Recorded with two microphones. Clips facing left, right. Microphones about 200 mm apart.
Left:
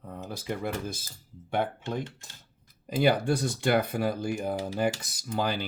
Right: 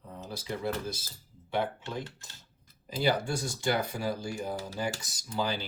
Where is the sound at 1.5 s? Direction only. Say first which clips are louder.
Left 3 dB; 55° left (ahead or behind).